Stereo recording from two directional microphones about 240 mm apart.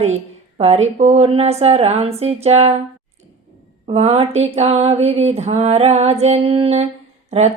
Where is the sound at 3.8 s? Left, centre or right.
Right.